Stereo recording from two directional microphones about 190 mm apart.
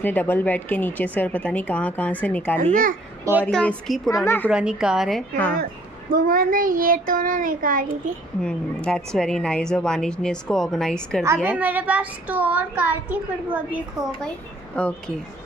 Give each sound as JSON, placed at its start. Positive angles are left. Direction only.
{"t": 0.0, "sound": "a woman's voice", "side_deg": 10}
{"t": 2.6, "sound": "a child's voice", "side_deg": -45}
{"t": 3.4, "sound": "a woman's voice", "side_deg": 5}
{"t": 6.1, "sound": "a child's voice", "side_deg": -50}
{"t": 8.4, "sound": "a woman's voice", "side_deg": 5}
{"t": 11.4, "sound": "a child's voice", "side_deg": -10}
{"t": 14.8, "sound": "a woman's voice", "side_deg": 5}